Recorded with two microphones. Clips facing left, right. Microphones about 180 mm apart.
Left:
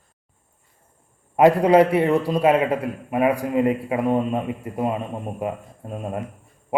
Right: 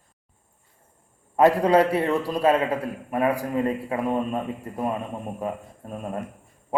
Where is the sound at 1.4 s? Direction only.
15° left (ahead or behind).